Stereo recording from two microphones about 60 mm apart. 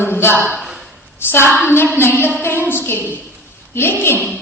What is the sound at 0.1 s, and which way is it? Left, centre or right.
A woman's voice, left.